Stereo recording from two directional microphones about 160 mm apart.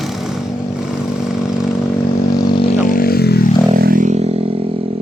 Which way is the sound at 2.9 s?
70° left (ahead or behind).